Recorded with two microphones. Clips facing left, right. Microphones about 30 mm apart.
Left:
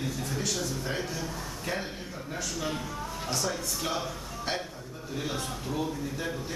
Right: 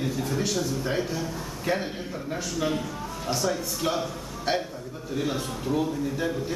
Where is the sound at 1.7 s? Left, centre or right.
Right.